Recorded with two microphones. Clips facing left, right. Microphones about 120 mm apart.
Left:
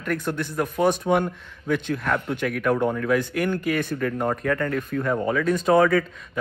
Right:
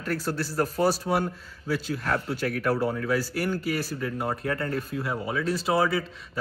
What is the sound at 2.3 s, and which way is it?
Speech, 35° right (ahead or behind).